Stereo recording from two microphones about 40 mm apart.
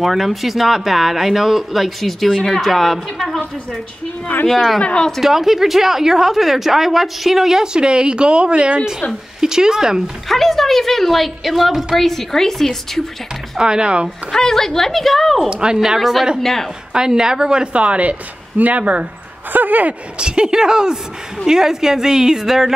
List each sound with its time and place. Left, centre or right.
0.0 s a woman's voice: centre
4.5 s a woman's voice: centre
4.8 s speech: left
5.2 s a woman's voice: centre; by 8.8 s right
9.4 s a woman's voice: centre
10.2 s a woman's voice: centre
13.6 s a woman's voice: right
14.3 s a woman's voice: centre
15.5 s a woman's voice: right
16.0 s a woman's voice: centre
16.9 s a woman's voice: centre
17.8 s speech: right
19.5 s speech: right
20.2 s a woman's voice: right